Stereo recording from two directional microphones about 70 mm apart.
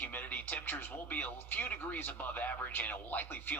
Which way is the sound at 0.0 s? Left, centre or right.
Left.